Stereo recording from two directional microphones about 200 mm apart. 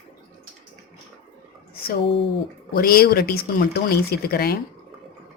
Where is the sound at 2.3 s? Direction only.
50° left (ahead or behind).